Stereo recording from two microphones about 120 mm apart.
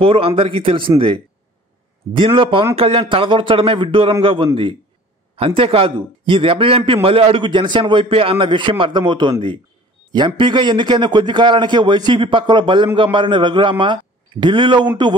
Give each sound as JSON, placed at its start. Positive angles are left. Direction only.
{"t": 0.0, "sound": "a man's voice", "side_deg": -50}